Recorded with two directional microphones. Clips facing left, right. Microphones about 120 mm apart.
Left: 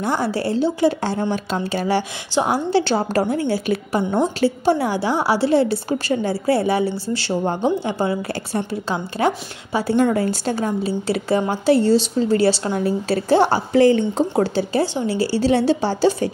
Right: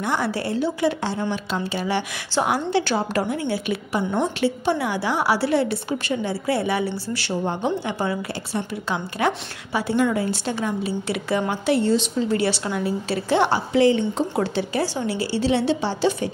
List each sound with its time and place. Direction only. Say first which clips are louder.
0.0 s a woman's voice: left 3 dB; 30° left (ahead or behind)
1.3 s a woman's voice: left 3 dB; 45° left (ahead or behind)
2.4 s a woman's voice: left 3 dB; 30° left (ahead or behind); by 14.2 s 45° left (ahead or behind)
14.4 s a woman's voice: left 4 dB; 35° left (ahead or behind)